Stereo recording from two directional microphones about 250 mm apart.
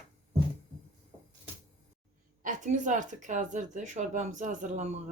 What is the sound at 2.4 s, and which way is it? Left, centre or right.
Speech, right.